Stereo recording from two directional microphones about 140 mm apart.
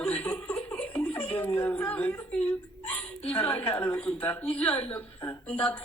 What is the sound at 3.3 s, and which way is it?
Speech, 15° left (ahead or behind).